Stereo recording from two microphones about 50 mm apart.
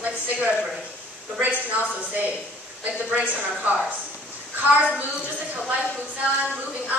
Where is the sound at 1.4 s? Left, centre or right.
Right.